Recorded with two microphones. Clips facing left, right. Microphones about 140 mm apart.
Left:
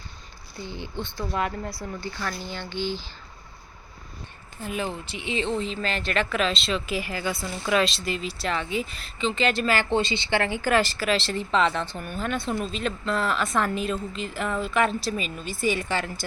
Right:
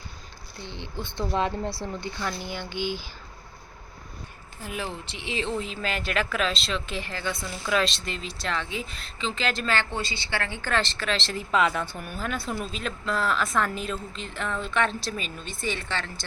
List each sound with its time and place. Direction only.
0.6 s speech: 5° left (ahead or behind)
1.1 s speech: 25° right (ahead or behind)
4.6 s speech: centre (ahead or behind)
9.9 s speech: 20° left (ahead or behind)